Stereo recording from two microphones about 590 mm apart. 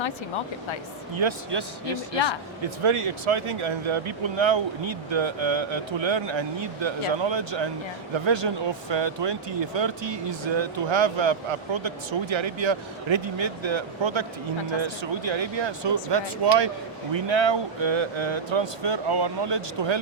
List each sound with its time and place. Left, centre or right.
1.1 s speech: right
2.1 s speech: left
2.8 s speech: right